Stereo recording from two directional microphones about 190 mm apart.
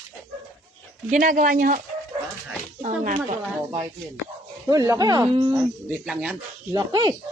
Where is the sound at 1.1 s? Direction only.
45° right (ahead or behind).